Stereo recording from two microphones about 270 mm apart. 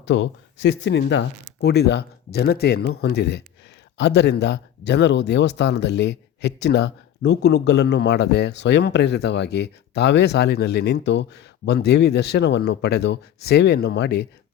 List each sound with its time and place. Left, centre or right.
0.0 s speech: left